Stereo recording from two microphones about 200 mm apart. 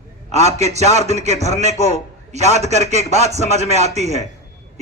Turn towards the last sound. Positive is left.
turn(degrees=-35)  # may be behind; listen again after turning